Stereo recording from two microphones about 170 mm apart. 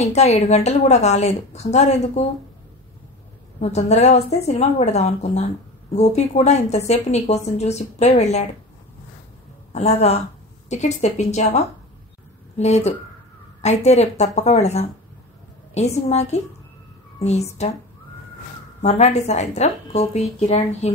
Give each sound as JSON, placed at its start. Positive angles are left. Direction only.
{"t": 0.0, "sound": "a woman's voice", "side_deg": 40}
{"t": 3.6, "sound": "a woman's voice", "side_deg": 40}
{"t": 9.7, "sound": "a woman's voice", "side_deg": 40}
{"t": 18.8, "sound": "a woman's voice", "side_deg": 40}